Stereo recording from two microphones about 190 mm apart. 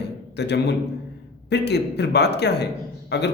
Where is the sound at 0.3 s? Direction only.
65° left (ahead or behind).